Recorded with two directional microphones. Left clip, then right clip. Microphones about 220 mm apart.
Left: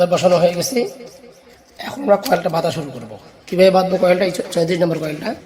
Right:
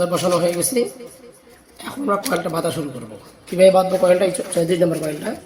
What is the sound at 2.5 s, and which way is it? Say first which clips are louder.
Speech: left 3 dB; 40° left (ahead or behind).